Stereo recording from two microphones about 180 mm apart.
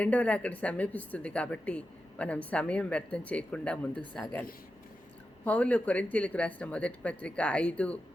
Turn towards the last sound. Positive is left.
turn(degrees=5)  # may be behind; listen again after turning